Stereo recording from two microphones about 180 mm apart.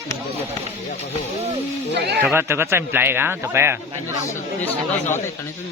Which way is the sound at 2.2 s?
10° right (ahead or behind).